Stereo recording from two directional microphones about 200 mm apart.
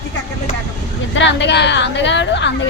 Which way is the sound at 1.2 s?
60° left (ahead or behind).